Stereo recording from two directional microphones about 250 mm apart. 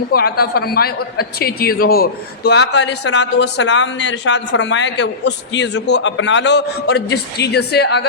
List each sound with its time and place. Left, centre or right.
0.1 s a woman's voice: left